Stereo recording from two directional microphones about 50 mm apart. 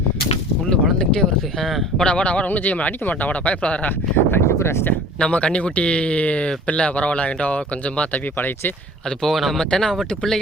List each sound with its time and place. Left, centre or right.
0.9 s speech: centre
2.0 s speech: left
3.8 s speech: left
5.2 s speech: left
8.4 s speech: left
9.0 s speech: centre